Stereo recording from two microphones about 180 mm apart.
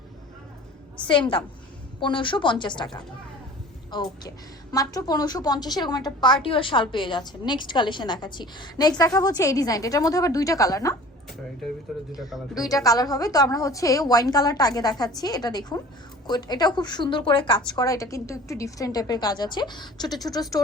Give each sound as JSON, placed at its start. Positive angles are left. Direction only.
{"t": 2.0, "sound": "a woman's voice", "side_deg": 25}
{"t": 12.5, "sound": "a woman's voice", "side_deg": 20}